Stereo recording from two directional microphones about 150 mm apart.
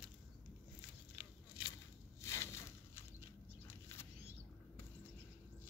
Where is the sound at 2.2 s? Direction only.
20° left (ahead or behind).